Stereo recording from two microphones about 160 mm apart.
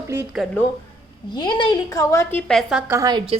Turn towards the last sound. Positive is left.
turn(degrees=-30)  # may be behind; listen again after turning